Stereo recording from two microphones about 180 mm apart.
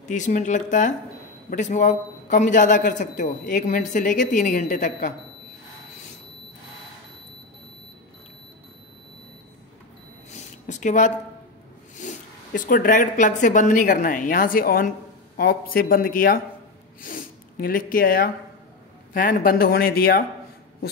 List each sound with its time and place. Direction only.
0.1 s a man's voice: 45° left (ahead or behind)
10.3 s a sound: 40° left (ahead or behind)
12.0 s a man's voice: 45° left (ahead or behind)